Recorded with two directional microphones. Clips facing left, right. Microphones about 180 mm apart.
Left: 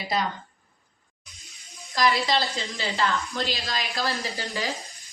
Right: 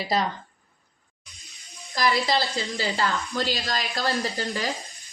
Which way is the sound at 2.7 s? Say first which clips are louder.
Even; 40° right (ahead or behind).